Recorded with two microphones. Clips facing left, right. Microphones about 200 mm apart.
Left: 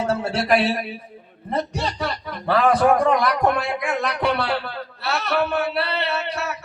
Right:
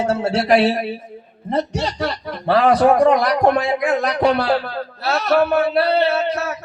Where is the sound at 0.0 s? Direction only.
25° right (ahead or behind).